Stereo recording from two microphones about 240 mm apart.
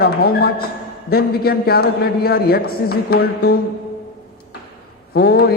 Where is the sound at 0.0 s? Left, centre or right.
Left.